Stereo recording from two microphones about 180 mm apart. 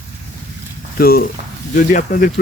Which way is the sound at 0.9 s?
55° left (ahead or behind).